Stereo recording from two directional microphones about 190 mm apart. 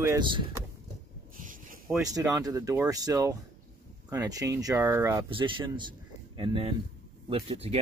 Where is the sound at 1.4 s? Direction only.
45° right (ahead or behind).